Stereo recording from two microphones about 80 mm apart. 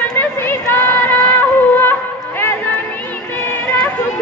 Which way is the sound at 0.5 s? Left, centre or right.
Left.